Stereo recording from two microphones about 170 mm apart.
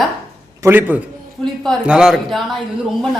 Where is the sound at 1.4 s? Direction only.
Centre (ahead or behind).